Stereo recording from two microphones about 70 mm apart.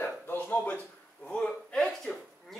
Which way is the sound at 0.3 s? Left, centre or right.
Left.